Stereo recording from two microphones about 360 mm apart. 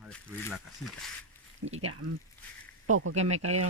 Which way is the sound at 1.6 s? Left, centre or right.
Right.